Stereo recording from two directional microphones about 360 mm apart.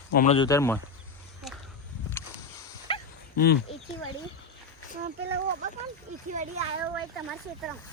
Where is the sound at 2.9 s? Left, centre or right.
Centre.